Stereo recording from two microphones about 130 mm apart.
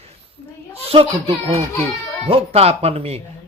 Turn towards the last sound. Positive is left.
turn(degrees=-50)  # may be behind; listen again after turning